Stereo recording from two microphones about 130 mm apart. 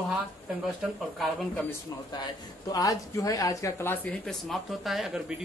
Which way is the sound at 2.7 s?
25° left (ahead or behind).